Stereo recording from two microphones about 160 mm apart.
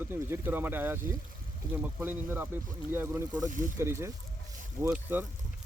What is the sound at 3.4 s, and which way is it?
Speech, 55° right (ahead or behind).